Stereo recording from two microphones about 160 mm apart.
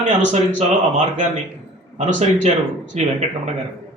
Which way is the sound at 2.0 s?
50° right (ahead or behind).